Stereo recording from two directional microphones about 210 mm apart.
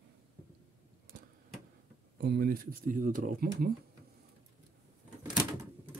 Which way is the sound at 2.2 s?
45° right (ahead or behind).